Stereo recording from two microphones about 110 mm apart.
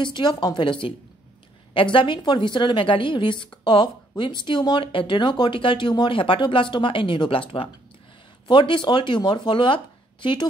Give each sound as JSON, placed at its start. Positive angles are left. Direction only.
{"t": 0.0, "sound": "speech", "side_deg": 45}